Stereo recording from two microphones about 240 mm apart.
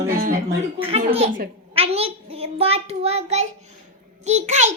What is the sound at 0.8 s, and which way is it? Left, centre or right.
A child's voice, right.